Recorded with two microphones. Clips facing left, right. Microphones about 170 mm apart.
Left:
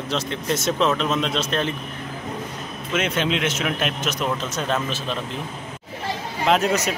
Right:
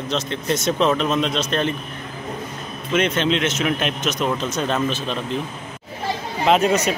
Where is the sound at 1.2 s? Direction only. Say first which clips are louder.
Right 2 dB; 5° left (ahead or behind).